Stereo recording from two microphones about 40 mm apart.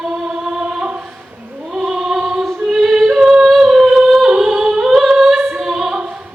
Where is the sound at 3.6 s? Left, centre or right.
Centre.